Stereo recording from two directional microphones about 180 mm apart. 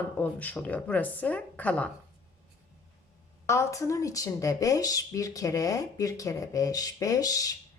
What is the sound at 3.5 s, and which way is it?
A woman's voice, 15° left (ahead or behind).